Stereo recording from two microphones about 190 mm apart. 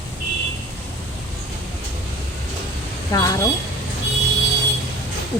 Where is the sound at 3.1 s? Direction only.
20° left (ahead or behind).